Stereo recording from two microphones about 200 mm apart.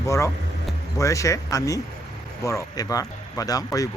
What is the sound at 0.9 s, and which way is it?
Speech, 15° left (ahead or behind).